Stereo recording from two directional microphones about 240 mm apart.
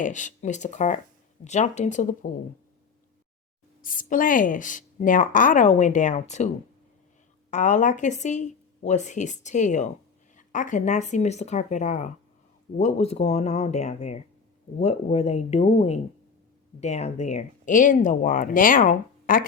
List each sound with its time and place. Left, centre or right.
0.0 s speech: left
3.8 s speech: left
7.5 s speech: left